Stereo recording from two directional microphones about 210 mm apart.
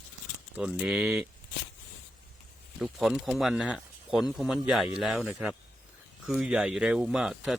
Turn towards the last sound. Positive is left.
turn(degrees=-5)  # may be behind; listen again after turning